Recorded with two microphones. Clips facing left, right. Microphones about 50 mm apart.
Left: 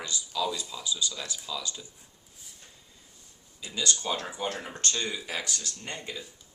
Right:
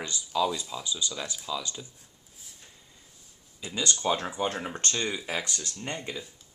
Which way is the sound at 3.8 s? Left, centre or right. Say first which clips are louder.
Right 3 dB; right.